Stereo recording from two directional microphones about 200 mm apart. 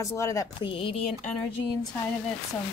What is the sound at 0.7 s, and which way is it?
Speech, 30° left (ahead or behind).